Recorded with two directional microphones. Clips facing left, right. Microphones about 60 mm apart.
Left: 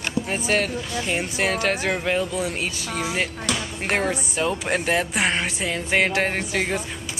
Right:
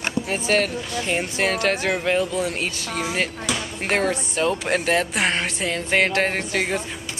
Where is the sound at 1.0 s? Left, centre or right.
Centre.